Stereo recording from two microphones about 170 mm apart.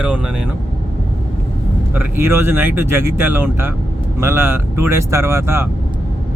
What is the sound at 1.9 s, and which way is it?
Speech, 10° right (ahead or behind).